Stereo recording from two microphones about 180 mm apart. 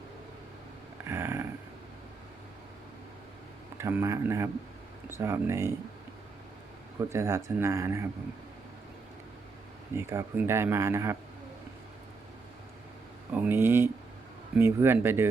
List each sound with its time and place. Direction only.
1.0 s a sound: 15° right (ahead or behind)
3.8 s speech: 15° right (ahead or behind)
7.1 s speech: 15° right (ahead or behind)
10.0 s speech: 15° right (ahead or behind)
13.3 s speech: 10° right (ahead or behind)